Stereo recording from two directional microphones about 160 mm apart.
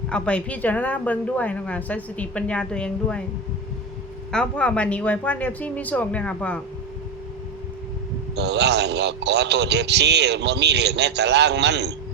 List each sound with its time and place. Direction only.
0.1 s a woman's voice: 5° left (ahead or behind)
4.3 s a woman's voice: 5° left (ahead or behind)
8.4 s a man's voice: 90° right